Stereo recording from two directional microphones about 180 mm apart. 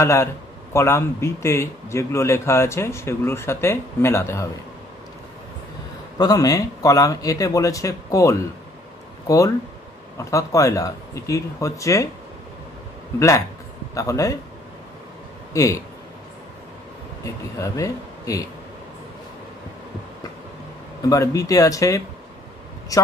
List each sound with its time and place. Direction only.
0.0 s a man's voice: 15° left (ahead or behind)
6.1 s speech: 20° left (ahead or behind)
10.1 s a man's voice: 15° left (ahead or behind)
13.9 s a man's voice: 15° left (ahead or behind)
15.5 s speech: 20° left (ahead or behind)
17.2 s speech: 15° left (ahead or behind)
21.1 s speech: 20° left (ahead or behind)